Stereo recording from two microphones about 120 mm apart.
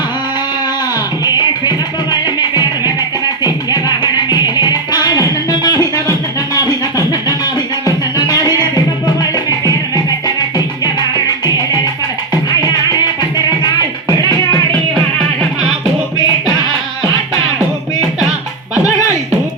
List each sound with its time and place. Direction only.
1.3 s music: 35° left (ahead or behind)
6.7 s a sound: 30° left (ahead or behind)
7.9 s music: 35° left (ahead or behind)
13.3 s music: 35° left (ahead or behind)